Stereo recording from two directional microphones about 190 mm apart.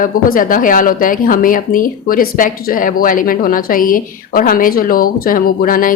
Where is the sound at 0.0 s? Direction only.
45° left (ahead or behind).